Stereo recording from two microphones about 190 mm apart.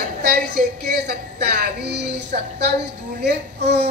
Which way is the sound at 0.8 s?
60° right (ahead or behind).